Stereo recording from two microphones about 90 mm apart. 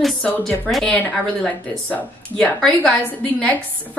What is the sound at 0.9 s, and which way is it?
Speech, 15° left (ahead or behind).